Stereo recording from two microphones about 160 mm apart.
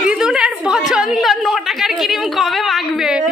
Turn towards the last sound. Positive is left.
turn(degrees=-5)  # may be behind; listen again after turning